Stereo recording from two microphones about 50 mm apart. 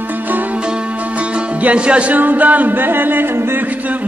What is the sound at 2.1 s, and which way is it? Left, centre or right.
A man's voice, right.